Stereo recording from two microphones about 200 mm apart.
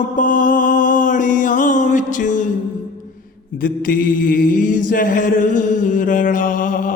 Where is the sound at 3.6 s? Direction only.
45° left (ahead or behind).